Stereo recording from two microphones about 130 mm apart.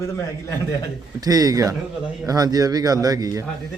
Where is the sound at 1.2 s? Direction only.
30° right (ahead or behind).